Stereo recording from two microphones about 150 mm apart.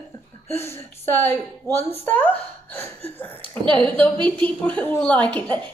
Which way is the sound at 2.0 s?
10° left (ahead or behind).